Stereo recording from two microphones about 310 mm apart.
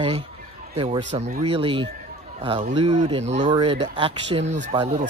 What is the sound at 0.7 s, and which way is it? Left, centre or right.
Speech, centre.